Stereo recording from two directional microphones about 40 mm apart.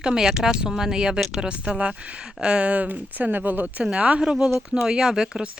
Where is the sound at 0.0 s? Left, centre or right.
Centre; by 3.8 s right.